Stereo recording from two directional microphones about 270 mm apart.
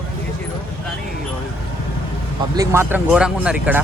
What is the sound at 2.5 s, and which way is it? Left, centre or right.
Speech, centre.